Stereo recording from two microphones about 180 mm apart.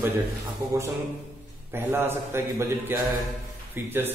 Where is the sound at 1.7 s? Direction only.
10° right (ahead or behind).